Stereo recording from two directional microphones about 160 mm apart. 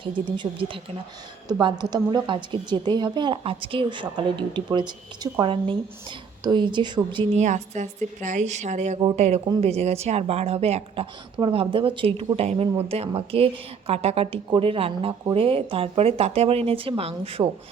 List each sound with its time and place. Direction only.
0.0 s speech: 35° right (ahead or behind)
7.3 s a woman's voice: 45° right (ahead or behind)